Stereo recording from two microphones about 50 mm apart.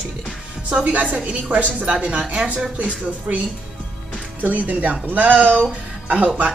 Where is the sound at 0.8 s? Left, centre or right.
Right.